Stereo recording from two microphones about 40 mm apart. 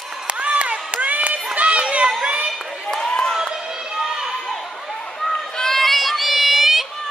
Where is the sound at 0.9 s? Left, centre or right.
Right.